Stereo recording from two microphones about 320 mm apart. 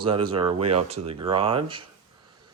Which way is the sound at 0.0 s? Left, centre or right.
Centre.